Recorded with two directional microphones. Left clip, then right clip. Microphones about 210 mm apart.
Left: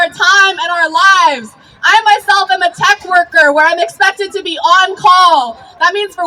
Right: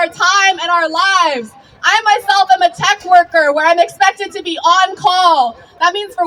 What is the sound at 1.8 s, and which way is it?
A woman's voice, 20° left (ahead or behind).